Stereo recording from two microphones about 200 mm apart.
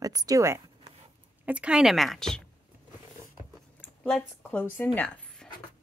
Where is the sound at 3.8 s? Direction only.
5° left (ahead or behind).